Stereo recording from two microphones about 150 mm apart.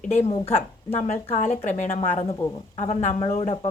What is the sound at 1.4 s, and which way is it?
A woman's voice, 55° left (ahead or behind).